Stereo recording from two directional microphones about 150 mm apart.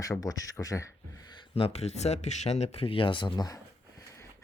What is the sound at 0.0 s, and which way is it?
Speech, 25° left (ahead or behind).